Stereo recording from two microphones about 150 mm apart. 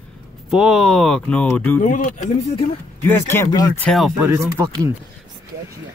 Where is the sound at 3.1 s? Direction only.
15° left (ahead or behind).